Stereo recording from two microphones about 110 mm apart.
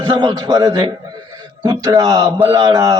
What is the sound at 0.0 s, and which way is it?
Speech, 45° right (ahead or behind).